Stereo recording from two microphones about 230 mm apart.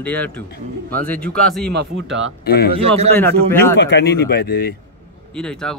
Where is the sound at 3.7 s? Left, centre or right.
Left.